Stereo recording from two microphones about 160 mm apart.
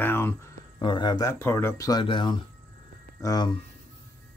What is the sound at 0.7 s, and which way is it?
Speech, 30° left (ahead or behind).